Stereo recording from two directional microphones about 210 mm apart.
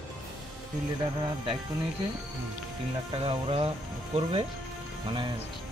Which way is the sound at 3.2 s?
25° right (ahead or behind).